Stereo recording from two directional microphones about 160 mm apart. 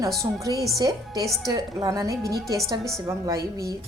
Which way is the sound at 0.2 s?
20° right (ahead or behind).